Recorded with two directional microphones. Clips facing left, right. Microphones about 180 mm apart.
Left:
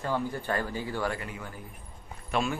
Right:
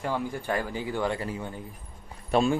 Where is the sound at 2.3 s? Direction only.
30° right (ahead or behind).